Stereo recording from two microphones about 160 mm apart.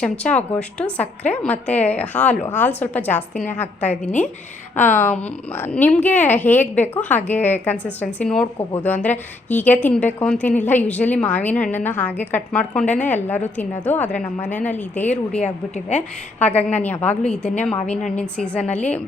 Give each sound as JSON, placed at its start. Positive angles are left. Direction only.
{"t": 0.0, "sound": "a woman's voice", "side_deg": 10}
{"t": 15.4, "sound": "a woman's voice", "side_deg": 45}
{"t": 16.4, "sound": "a woman's voice", "side_deg": 10}